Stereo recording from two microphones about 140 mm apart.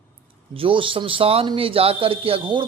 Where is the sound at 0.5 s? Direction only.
40° right (ahead or behind).